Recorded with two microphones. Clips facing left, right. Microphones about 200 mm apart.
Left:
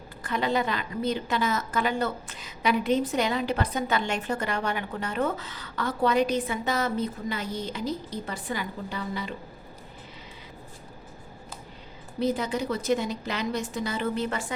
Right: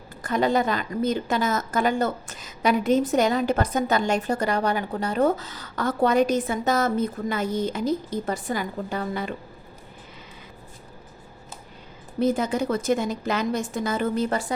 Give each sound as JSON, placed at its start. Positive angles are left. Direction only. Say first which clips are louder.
{"t": 0.2, "sound": "a woman's voice", "louder": "right 5 dB", "side_deg": -45}
{"t": 12.2, "sound": "a woman's voice", "louder": "right 4 dB", "side_deg": -50}